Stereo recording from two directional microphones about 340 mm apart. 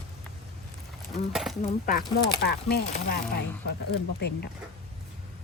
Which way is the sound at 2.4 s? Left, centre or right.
Left.